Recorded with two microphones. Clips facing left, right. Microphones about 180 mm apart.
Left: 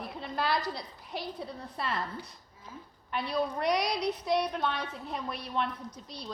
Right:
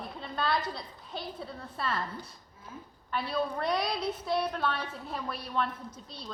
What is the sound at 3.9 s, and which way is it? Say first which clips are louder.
Child singing: left 2 dB; 5° right (ahead or behind).